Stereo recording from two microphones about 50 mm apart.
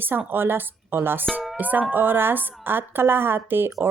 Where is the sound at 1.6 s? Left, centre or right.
Right.